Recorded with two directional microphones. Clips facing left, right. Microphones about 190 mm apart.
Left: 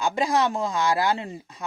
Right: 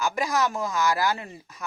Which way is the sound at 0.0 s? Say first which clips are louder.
Left 3 dB; 25° left (ahead or behind).